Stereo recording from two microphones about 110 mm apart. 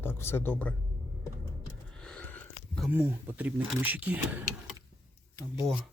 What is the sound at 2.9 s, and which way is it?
Speech, 15° right (ahead or behind).